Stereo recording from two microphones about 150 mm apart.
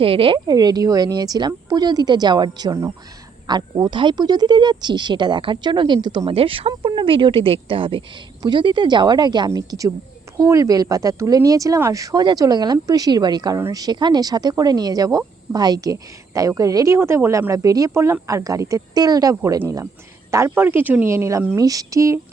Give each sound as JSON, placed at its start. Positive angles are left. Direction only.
{"t": 0.0, "sound": "speech", "side_deg": -35}